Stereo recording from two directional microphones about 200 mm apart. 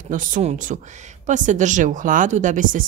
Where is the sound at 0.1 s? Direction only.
40° right (ahead or behind).